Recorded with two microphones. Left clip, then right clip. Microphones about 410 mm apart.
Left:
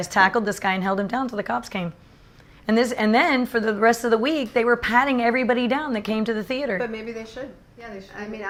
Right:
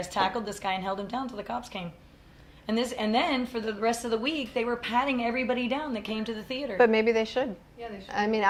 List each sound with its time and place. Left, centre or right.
0.0 s a woman's voice: left
6.7 s a woman's voice: right